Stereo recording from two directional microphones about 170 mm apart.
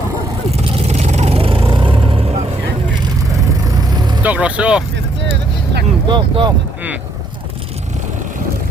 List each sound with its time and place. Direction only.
0.5 s vehicle: 40° right (ahead or behind)
3.8 s vehicle: 25° right (ahead or behind)
4.2 s speech: 10° right (ahead or behind)
6.1 s speech: 30° right (ahead or behind)